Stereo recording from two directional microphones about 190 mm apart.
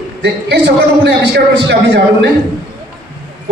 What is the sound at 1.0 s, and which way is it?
A man's voice, 65° right (ahead or behind).